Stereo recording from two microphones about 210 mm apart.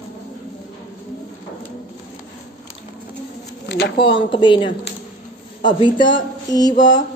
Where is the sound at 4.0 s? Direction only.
25° left (ahead or behind).